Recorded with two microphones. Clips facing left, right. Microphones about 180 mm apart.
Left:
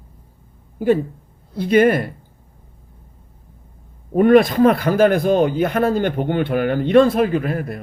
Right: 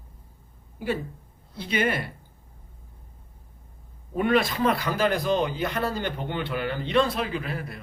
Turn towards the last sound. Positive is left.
turn(degrees=50)  # may be behind; listen again after turning